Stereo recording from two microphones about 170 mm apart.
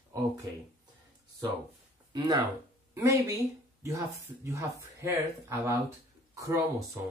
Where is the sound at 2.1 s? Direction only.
25° right (ahead or behind).